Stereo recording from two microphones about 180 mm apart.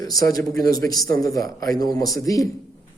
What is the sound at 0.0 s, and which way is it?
A man's voice, 20° left (ahead or behind).